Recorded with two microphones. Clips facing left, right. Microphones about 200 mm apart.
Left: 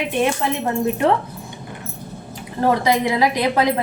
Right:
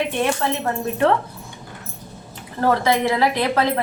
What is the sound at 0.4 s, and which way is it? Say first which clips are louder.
Speech: left 1 dB; 15° left (ahead or behind).